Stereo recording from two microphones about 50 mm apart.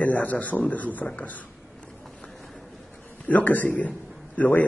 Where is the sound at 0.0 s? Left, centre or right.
Left.